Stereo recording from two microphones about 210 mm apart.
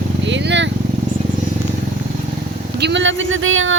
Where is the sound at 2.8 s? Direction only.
55° right (ahead or behind).